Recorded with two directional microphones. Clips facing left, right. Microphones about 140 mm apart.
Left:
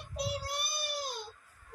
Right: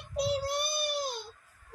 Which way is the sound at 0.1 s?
25° right (ahead or behind).